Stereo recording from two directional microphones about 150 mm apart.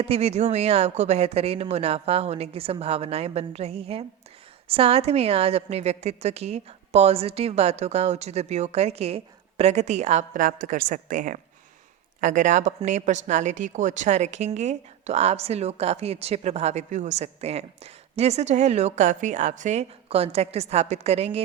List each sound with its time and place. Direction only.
0.0 s speech: 45° right (ahead or behind)